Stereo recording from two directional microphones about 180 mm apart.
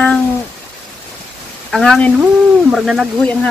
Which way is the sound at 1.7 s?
5° left (ahead or behind).